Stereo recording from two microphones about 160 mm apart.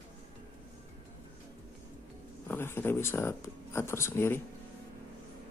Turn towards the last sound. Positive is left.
turn(degrees=15)  # may be behind; listen again after turning